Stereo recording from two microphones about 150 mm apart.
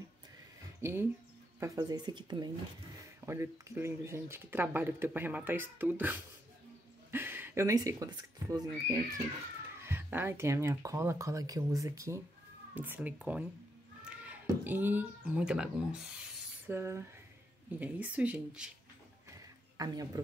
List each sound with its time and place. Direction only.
0.7 s speech: 15° right (ahead or behind)
3.3 s speech: 20° right (ahead or behind)
14.0 s a sound: 10° right (ahead or behind)
14.4 s speech: 15° right (ahead or behind)
16.7 s speech: 20° right (ahead or behind)
19.8 s speech: 25° right (ahead or behind)